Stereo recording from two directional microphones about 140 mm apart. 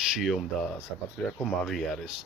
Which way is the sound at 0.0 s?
Centre (ahead or behind).